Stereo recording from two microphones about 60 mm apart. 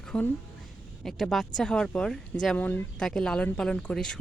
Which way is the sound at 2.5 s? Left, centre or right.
Left.